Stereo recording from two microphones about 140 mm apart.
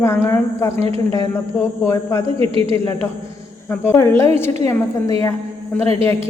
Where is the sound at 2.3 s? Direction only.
40° right (ahead or behind).